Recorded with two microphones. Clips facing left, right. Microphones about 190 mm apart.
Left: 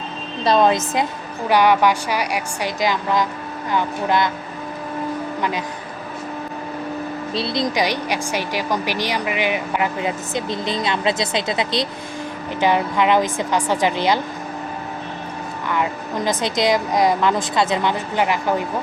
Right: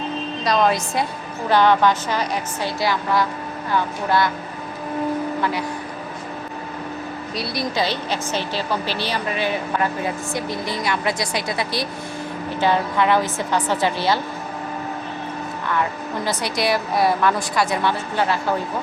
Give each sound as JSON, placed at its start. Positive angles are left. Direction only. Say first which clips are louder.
{"t": 0.4, "sound": "a woman's voice", "louder": "left 3 dB", "side_deg": 25}
{"t": 5.4, "sound": "music", "louder": "even", "side_deg": 20}
{"t": 7.3, "sound": "a woman's voice", "louder": "left 3 dB", "side_deg": 20}
{"t": 15.7, "sound": "a woman's voice", "louder": "left 1 dB", "side_deg": 15}